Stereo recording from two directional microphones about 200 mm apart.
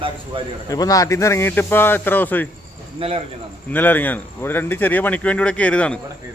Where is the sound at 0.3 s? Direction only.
25° right (ahead or behind).